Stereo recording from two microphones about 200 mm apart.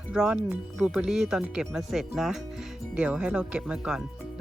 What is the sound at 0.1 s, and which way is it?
Speech, 5° right (ahead or behind).